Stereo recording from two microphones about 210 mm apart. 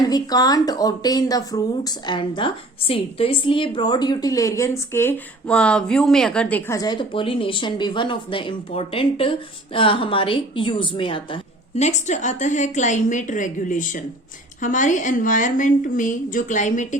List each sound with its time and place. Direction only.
0.0 s a woman's voice: 20° left (ahead or behind); by 17.0 s 35° left (ahead or behind)